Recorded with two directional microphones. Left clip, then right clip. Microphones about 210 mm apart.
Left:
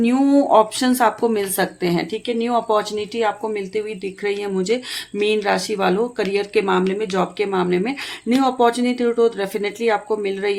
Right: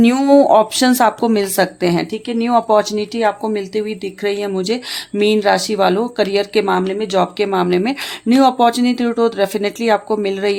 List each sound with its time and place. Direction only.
0.0 s speech: 40° right (ahead or behind)